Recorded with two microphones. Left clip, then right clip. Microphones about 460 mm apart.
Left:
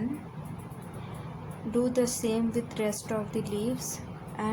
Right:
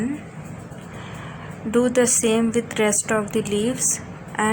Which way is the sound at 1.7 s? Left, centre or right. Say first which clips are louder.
Right 9 dB; right.